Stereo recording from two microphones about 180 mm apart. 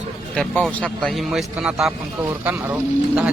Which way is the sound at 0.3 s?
5° left (ahead or behind).